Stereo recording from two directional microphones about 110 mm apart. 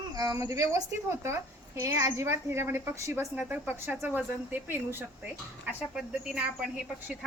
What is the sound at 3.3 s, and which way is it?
Speech, 15° right (ahead or behind).